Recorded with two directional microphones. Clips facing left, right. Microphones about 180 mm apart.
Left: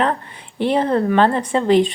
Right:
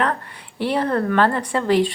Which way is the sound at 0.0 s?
20° left (ahead or behind).